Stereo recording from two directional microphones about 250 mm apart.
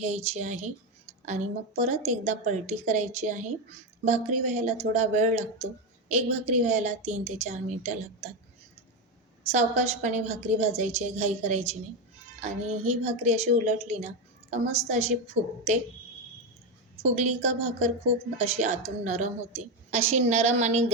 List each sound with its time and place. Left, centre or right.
0.3 s a woman's voice: right
9.5 s a woman's voice: right
17.0 s a woman's voice: right